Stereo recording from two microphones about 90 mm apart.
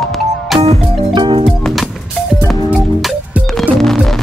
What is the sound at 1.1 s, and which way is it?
Music, 65° right (ahead or behind).